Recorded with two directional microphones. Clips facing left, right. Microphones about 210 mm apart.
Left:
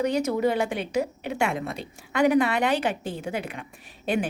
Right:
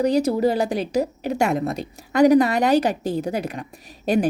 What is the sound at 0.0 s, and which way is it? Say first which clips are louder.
A woman's voice: right 5 dB; 35° right (ahead or behind).